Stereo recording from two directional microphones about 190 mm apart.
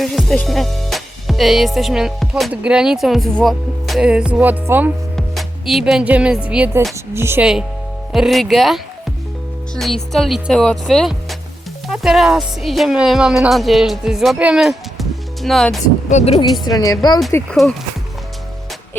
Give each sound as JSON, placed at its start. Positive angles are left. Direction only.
{"t": 0.0, "sound": "music", "side_deg": 0}
{"t": 5.1, "sound": "speech", "side_deg": 0}
{"t": 8.1, "sound": "music", "side_deg": 0}
{"t": 16.0, "sound": "speech", "side_deg": 35}
{"t": 16.6, "sound": "a woman's voice", "side_deg": 20}
{"t": 17.3, "sound": "music", "side_deg": 5}